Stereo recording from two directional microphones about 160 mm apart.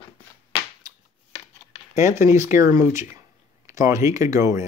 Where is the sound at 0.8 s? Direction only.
25° right (ahead or behind).